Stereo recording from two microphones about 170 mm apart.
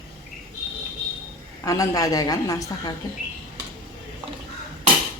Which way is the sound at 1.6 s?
20° left (ahead or behind).